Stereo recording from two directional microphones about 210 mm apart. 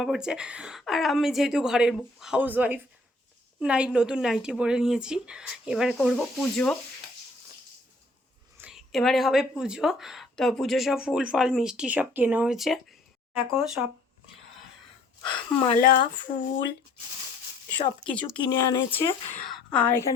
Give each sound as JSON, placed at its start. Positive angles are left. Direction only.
{"t": 0.0, "sound": "a woman's voice", "side_deg": -5}
{"t": 8.5, "sound": "a woman's voice", "side_deg": -5}
{"t": 15.2, "sound": "speech", "side_deg": 25}
{"t": 15.8, "sound": "speech", "side_deg": 45}
{"t": 18.3, "sound": "speech", "side_deg": 20}
{"t": 19.5, "sound": "a woman's voice", "side_deg": 5}